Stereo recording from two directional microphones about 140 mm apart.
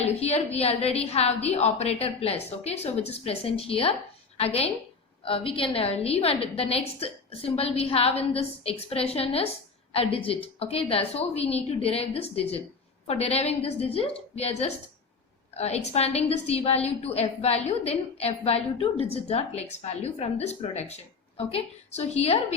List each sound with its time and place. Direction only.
0.0 s a woman's voice: 50° left (ahead or behind)